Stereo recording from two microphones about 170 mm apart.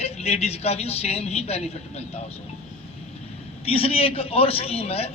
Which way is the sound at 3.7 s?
35° left (ahead or behind).